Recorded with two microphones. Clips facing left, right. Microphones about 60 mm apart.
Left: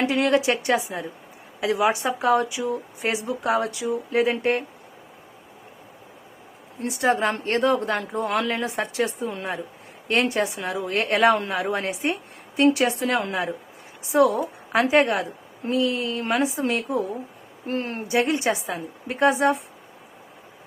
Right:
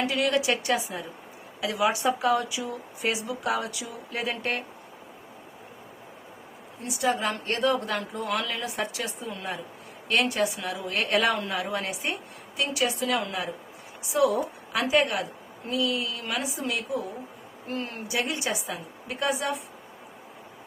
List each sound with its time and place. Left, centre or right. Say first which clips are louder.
0.0 s speech: left 5 dB; left
6.8 s speech: left 5 dB; left
12.5 s speech: left 8 dB; left